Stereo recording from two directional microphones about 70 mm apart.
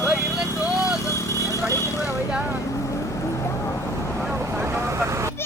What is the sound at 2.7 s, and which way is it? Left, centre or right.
Vehicle, left.